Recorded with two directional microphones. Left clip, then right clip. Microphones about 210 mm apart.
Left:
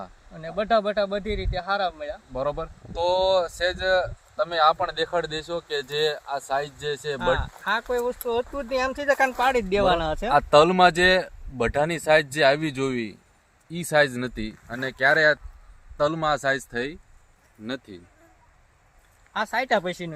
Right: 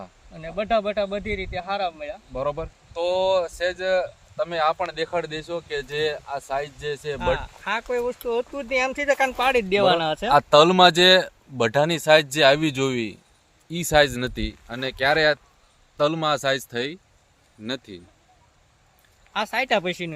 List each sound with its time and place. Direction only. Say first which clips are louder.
0.0 s speech: even; 5° left (ahead or behind)
2.3 s speech: right 1 dB; 10° right (ahead or behind)
10.2 s speech: right 2 dB; 40° right (ahead or behind)
19.3 s speech: right 1 dB; 35° right (ahead or behind)